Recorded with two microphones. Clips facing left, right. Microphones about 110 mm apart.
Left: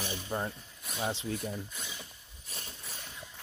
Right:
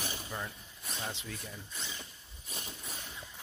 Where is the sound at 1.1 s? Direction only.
30° left (ahead or behind).